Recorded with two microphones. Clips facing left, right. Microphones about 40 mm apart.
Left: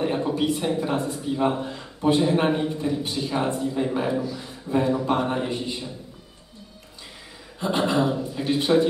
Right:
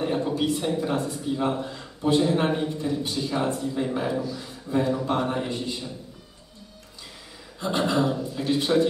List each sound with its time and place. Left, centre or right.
0.0 s a sound: centre
0.3 s a man's voice: left
7.6 s a man's voice: left